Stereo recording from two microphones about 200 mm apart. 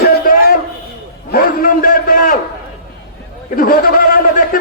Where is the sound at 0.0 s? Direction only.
45° left (ahead or behind).